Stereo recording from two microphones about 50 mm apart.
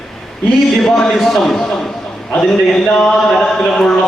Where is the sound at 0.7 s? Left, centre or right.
Centre.